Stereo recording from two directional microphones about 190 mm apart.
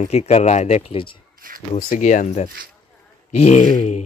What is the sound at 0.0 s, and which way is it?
Speech, 35° left (ahead or behind).